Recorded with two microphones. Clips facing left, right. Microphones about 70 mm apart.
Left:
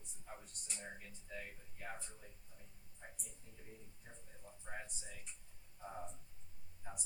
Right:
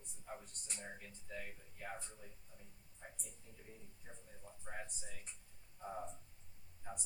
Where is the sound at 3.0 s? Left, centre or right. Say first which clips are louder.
Right 1 dB; centre.